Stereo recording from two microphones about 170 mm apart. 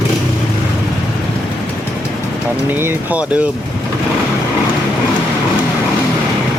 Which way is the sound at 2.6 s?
10° right (ahead or behind).